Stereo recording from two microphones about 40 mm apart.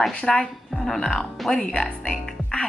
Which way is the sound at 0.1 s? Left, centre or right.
Left.